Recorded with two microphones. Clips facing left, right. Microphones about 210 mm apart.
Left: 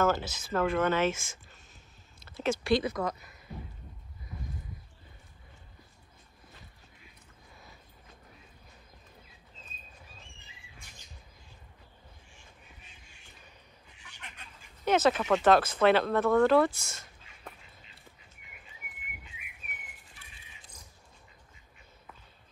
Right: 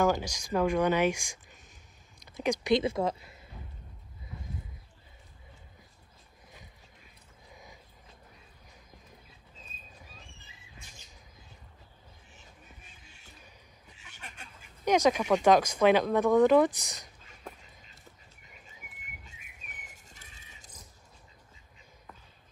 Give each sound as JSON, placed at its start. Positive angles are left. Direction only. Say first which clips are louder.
{"t": 0.0, "sound": "speech", "louder": "right 1 dB", "side_deg": -15}
{"t": 7.5, "sound": "a sound", "louder": "right 3 dB", "side_deg": -15}
{"t": 14.9, "sound": "speech", "louder": "right 1 dB", "side_deg": -15}
{"t": 19.2, "sound": "bird", "louder": "left 2 dB", "side_deg": -45}